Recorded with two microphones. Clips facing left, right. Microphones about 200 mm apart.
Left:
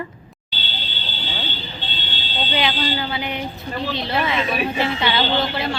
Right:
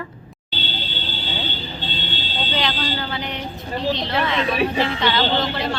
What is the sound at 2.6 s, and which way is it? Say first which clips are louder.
A woman's voice: left 2 dB; 10° left (ahead or behind).